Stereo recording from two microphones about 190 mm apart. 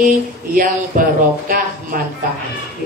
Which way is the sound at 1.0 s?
45° right (ahead or behind).